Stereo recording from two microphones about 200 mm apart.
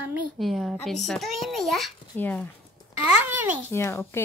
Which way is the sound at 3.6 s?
15° left (ahead or behind).